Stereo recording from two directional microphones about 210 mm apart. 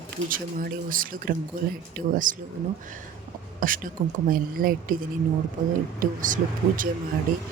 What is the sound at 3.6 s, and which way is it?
Speech, 40° right (ahead or behind).